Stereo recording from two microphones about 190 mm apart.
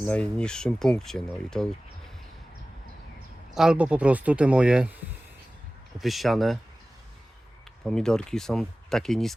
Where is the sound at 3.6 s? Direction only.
5° right (ahead or behind).